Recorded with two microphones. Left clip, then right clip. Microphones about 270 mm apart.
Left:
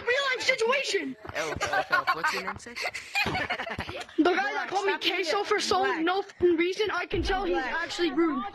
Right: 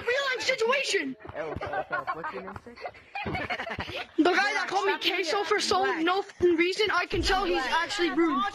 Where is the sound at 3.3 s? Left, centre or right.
Centre.